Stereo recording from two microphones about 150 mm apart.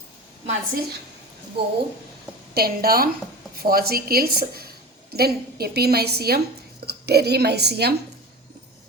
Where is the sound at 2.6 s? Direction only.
90° right.